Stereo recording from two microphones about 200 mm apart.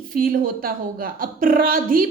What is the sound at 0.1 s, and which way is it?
Speech, 45° right (ahead or behind).